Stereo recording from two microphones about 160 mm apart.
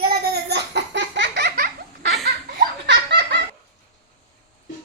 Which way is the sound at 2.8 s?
90° right.